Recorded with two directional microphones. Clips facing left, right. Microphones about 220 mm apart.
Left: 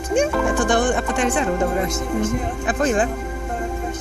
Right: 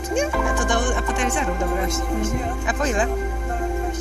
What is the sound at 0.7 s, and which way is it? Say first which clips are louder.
Music: left 4 dB; 35° left (ahead or behind).